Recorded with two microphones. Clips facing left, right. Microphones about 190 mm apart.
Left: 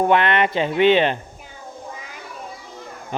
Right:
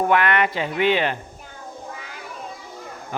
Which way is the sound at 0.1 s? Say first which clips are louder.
Left 2 dB; 25° left (ahead or behind).